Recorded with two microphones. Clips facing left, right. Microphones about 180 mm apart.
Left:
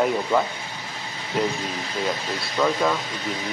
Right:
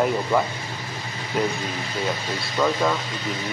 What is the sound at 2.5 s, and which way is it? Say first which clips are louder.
Speech: even; centre (ahead or behind).